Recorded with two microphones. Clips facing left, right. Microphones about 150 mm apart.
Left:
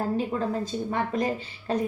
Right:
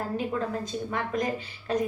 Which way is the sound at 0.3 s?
30° left (ahead or behind).